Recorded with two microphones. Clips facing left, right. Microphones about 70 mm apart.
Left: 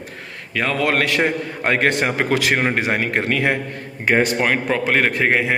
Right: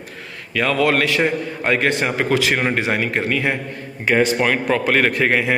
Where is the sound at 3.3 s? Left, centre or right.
Left.